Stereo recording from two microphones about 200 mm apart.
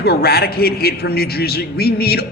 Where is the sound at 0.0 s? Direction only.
50° left (ahead or behind).